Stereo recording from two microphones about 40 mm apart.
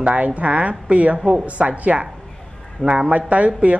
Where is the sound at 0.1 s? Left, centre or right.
Right.